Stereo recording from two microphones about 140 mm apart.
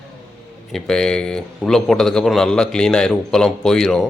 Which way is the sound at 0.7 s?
5° left (ahead or behind).